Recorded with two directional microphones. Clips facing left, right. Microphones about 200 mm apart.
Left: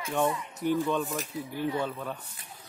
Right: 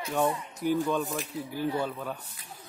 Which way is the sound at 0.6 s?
5° right (ahead or behind).